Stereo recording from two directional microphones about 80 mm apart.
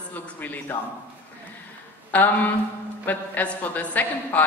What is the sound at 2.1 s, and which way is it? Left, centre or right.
A man's voice, left.